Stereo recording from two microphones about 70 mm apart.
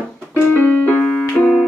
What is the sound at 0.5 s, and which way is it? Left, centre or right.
Keyboard, left.